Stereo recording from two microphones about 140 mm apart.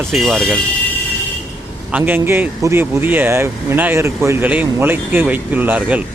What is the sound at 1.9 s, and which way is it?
Speech, 15° right (ahead or behind).